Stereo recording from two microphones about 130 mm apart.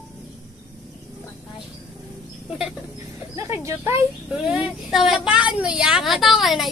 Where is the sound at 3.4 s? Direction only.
20° right (ahead or behind).